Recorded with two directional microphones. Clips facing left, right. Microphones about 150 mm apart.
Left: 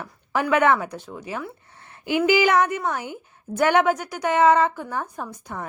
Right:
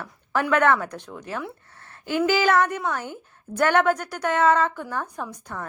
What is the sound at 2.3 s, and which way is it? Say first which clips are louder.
A woman's voice: left 2 dB; 15° left (ahead or behind).